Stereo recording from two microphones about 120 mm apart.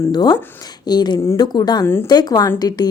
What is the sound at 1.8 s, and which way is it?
Speech, 20° left (ahead or behind).